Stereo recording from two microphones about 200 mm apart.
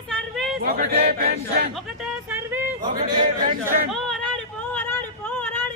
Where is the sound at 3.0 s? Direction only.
40° right (ahead or behind).